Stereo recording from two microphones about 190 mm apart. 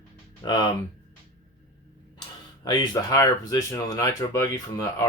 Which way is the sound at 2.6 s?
25° left (ahead or behind).